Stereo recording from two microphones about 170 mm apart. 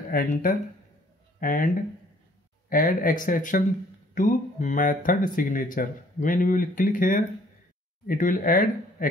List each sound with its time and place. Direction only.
0.1 s speech: 55° left (ahead or behind)
2.7 s speech: 55° left (ahead or behind)